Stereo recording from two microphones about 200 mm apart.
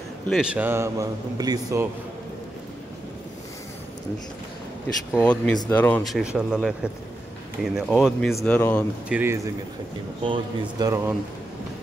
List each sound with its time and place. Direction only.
0.3 s a man's voice: 5° right (ahead or behind)
5.1 s speech: 5° left (ahead or behind)
9.1 s a man's voice: 10° right (ahead or behind)
10.2 s speech: 25° right (ahead or behind)